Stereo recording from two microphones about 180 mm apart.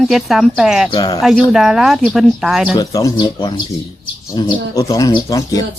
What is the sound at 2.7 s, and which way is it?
Speech, 20° left (ahead or behind).